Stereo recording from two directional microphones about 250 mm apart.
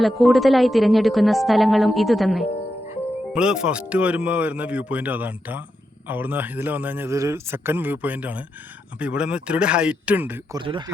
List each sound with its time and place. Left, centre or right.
0.0 s a woman's voice: centre
10.6 s a man's voice: centre